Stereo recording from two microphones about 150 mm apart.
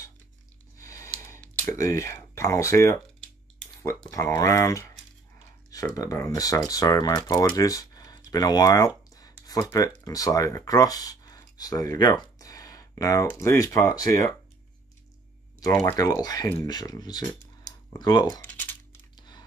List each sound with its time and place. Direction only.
0.7 s a sound: 20° left (ahead or behind)
1.2 s speech: 15° left (ahead or behind)
4.1 s speech: 20° left (ahead or behind)
15.6 s speech: 20° left (ahead or behind)
18.4 s typing: 10° left (ahead or behind)
19.1 s typing: 30° left (ahead or behind)